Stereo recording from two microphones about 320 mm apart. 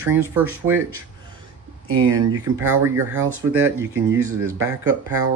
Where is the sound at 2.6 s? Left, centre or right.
Centre.